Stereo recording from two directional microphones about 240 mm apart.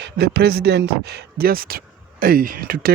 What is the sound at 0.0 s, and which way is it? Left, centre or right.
Speech, right.